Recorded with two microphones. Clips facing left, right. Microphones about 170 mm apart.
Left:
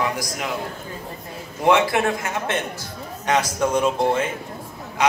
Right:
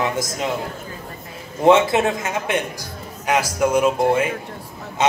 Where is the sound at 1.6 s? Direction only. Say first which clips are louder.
Right 4 dB; 20° right (ahead or behind).